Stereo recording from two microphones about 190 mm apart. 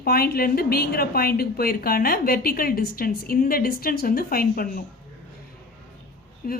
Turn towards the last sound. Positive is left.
turn(degrees=50)  # may be behind; listen again after turning